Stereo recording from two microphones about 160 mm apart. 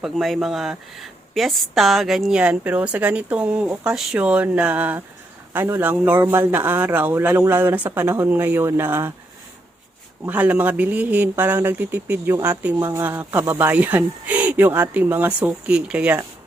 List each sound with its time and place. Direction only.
0.0 s a woman's voice: centre (ahead or behind)
10.2 s a man's voice: 10° right (ahead or behind)